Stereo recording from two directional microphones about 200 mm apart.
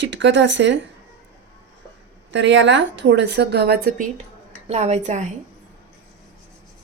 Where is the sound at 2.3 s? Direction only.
65° right (ahead or behind); by 4.0 s 45° right (ahead or behind).